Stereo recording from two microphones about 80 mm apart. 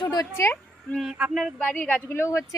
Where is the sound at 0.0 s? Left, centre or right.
Left.